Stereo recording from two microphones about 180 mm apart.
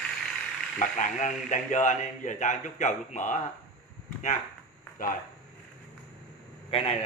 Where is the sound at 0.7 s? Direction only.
40° left (ahead or behind).